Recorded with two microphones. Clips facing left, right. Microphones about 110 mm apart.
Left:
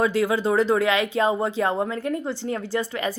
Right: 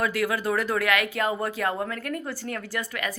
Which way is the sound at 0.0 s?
25° left (ahead or behind).